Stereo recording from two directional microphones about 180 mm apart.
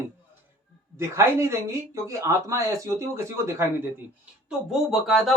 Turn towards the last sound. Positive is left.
turn(degrees=0)  # may be behind; listen again after turning